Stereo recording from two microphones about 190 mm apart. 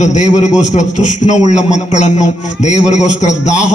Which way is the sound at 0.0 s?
40° left (ahead or behind).